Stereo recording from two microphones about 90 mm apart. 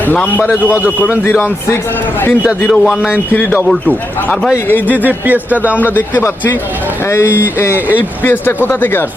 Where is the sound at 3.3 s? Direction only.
15° left (ahead or behind).